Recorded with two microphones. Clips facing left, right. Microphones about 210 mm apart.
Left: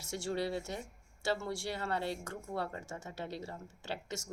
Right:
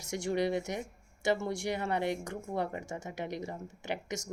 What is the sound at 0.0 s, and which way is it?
Speech, 15° right (ahead or behind).